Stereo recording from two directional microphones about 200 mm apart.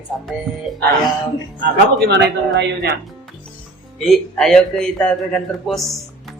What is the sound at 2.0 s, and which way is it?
Speech, 60° right (ahead or behind).